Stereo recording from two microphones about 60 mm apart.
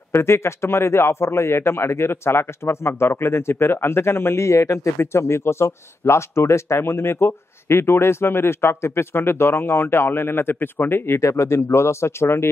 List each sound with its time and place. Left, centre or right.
0.2 s a man's voice: left
4.9 s a man's voice: left
11.1 s a man's voice: left